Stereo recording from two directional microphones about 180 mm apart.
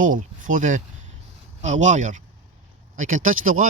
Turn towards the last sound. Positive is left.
turn(degrees=-50)  # may be behind; listen again after turning